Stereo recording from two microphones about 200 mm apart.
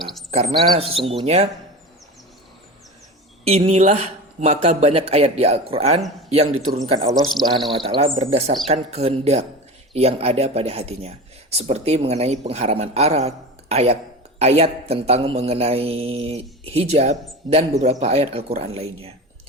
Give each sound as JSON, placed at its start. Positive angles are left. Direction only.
{"t": 0.0, "sound": "bird", "side_deg": 0}
{"t": 0.3, "sound": "speech", "side_deg": -30}
{"t": 3.4, "sound": "a woman's voice", "side_deg": -30}